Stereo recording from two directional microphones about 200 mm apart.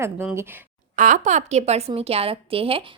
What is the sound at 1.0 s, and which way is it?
A woman's voice, 40° right (ahead or behind).